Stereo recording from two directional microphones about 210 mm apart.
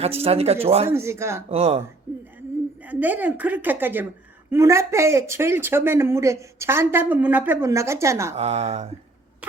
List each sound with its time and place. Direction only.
0.0 s speech: 30° right (ahead or behind)
0.9 s speech: 15° right (ahead or behind)
1.5 s speech: 30° right (ahead or behind)
2.1 s a sound: 10° right (ahead or behind)
2.8 s speech: 10° right (ahead or behind)
8.4 s speech: 30° right (ahead or behind)